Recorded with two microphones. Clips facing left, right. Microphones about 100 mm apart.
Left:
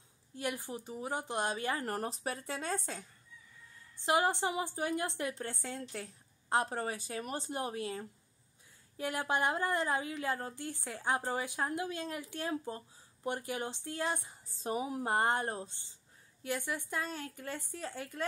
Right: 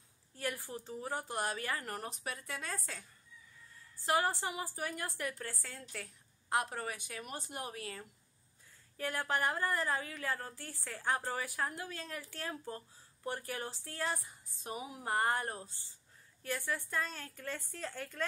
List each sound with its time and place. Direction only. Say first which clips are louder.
0.4 s a woman's voice: left 2 dB; 20° left (ahead or behind)
1.9 s a woman's voice: left 5 dB; 35° left (ahead or behind)
15.0 s a woman's voice: left 1 dB; 25° left (ahead or behind)